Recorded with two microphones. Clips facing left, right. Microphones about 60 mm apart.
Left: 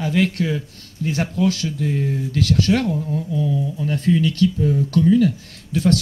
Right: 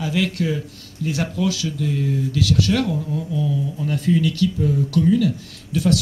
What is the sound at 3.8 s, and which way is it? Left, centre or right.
Speech, left.